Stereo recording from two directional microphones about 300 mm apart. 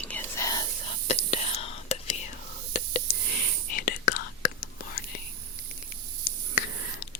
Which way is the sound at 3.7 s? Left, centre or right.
Left.